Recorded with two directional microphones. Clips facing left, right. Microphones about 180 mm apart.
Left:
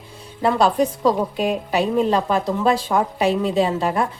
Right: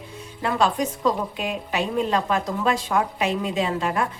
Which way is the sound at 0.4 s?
35° left (ahead or behind).